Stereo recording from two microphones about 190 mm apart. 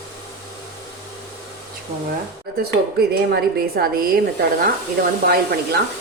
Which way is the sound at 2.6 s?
55° right (ahead or behind).